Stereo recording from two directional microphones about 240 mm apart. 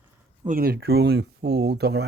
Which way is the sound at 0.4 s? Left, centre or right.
Right.